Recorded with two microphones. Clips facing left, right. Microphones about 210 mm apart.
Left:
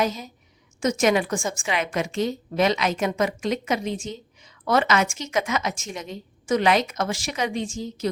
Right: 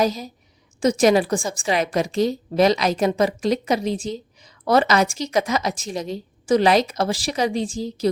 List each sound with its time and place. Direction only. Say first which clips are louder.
0.0 s a woman's voice: right 4 dB; 35° right (ahead or behind)